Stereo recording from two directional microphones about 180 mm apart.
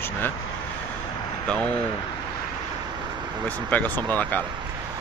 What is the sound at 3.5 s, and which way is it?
Speech, 10° left (ahead or behind).